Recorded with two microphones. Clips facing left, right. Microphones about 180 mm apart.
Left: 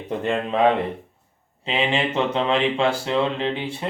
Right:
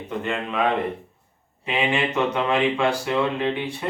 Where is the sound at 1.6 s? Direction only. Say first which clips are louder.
Left 1 dB; 25° left (ahead or behind).